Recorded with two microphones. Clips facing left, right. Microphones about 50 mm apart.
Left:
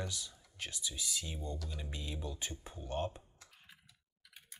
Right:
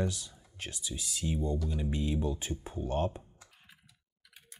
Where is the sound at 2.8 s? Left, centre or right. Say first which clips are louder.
Right 6 dB; right.